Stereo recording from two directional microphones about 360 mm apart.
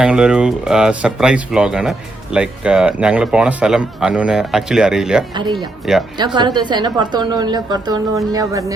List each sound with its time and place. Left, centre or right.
0.0 s speech: centre
6.1 s a woman's voice: centre